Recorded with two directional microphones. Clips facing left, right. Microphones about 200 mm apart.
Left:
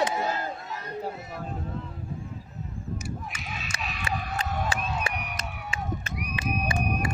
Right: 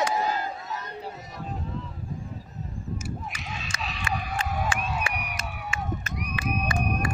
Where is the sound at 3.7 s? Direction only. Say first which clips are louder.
Right 1 dB; 35° left (ahead or behind).